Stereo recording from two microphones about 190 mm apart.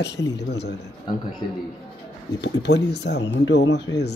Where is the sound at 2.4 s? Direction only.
65° left (ahead or behind).